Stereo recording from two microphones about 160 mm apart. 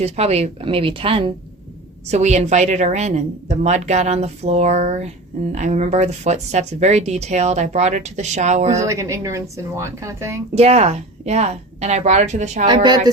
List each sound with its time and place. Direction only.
0.0 s speech: 40° right (ahead or behind)
2.0 s a woman's voice: 45° right (ahead or behind)
8.8 s speech: 20° right (ahead or behind)
10.5 s a woman's voice: 40° right (ahead or behind)
12.6 s speech: 25° right (ahead or behind)